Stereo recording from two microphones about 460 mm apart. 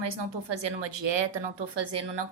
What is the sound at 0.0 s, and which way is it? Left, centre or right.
Speech, right.